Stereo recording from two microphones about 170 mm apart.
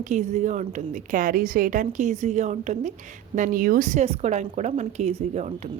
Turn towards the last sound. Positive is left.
turn(degrees=-40)  # may be behind; listen again after turning